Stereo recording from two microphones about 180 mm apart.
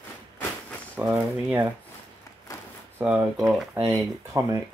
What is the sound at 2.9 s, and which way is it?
Speech, 5° right (ahead or behind).